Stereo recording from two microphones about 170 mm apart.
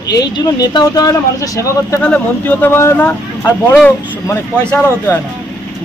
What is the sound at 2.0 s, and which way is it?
Speech, 10° left (ahead or behind).